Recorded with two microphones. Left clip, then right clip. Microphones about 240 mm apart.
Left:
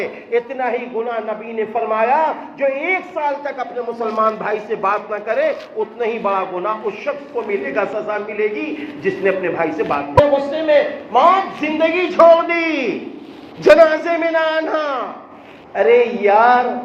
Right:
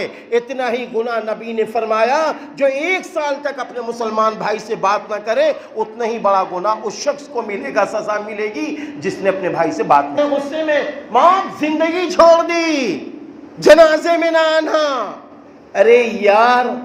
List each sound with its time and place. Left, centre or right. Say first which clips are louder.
0.0 s a woman's voice: right 1 dB; right
10.5 s a woman's voice: left 3 dB; right